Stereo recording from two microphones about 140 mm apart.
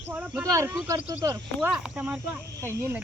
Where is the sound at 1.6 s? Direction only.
5° right (ahead or behind).